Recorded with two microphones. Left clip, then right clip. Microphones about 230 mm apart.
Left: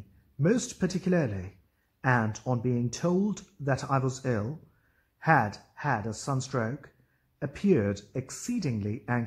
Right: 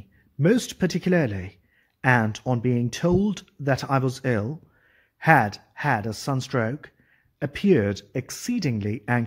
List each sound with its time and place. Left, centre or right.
0.4 s speech: right